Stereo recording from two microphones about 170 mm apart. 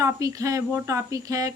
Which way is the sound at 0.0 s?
20° right (ahead or behind).